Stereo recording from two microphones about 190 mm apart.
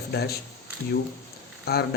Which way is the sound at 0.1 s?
55° left (ahead or behind).